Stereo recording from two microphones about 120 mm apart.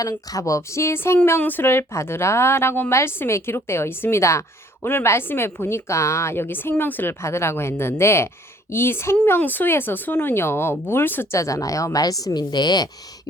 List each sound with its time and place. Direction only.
0.0 s speech: 30° left (ahead or behind)